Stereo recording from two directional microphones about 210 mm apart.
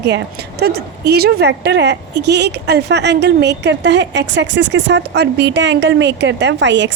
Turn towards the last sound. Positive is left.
turn(degrees=-60)  # may be behind; listen again after turning